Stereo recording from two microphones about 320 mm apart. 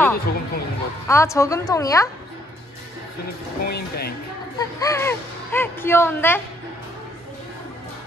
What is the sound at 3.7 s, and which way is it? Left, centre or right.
Speech, left.